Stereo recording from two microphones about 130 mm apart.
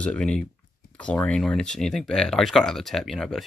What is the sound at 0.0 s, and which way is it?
Speech, 10° left (ahead or behind).